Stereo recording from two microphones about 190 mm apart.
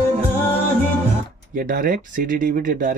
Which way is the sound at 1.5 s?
45° right (ahead or behind).